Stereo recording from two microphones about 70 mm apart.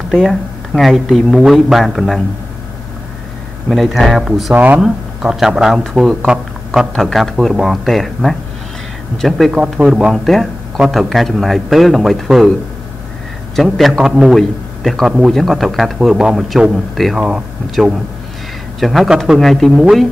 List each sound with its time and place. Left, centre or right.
0.1 s speech: centre
3.6 s speech: centre
6.9 s speech: centre
9.8 s speech: centre
10.1 s speech: centre
13.6 s speech: centre
15.0 s speech: centre